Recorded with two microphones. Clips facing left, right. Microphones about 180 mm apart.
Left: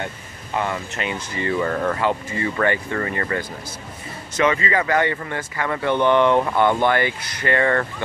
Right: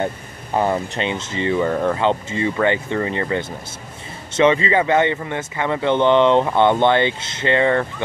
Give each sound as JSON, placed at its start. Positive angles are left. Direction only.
{"t": 0.6, "sound": "speech", "side_deg": -35}
{"t": 2.0, "sound": "speech", "side_deg": -20}